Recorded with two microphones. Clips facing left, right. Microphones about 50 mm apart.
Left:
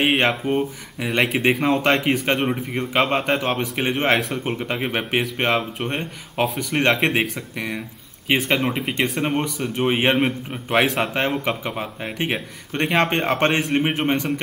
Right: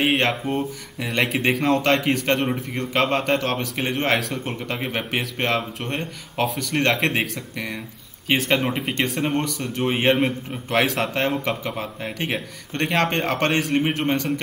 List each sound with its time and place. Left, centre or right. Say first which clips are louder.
0.3 s speech: left 3 dB; centre
4.5 s speech: left 3 dB; centre